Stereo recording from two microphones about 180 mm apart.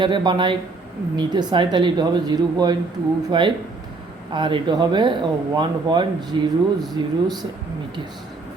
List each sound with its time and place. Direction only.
0.0 s speech: 25° right (ahead or behind)